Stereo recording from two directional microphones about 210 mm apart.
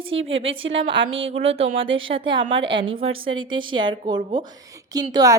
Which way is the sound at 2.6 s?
60° right (ahead or behind).